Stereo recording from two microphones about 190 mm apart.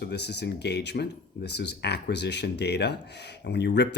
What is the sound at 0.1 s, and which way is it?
Speech, 60° left (ahead or behind).